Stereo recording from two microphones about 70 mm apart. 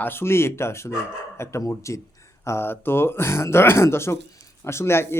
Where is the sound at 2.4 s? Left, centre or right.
Left.